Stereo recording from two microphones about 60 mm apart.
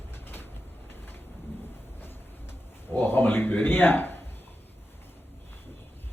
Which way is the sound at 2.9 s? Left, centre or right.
Left.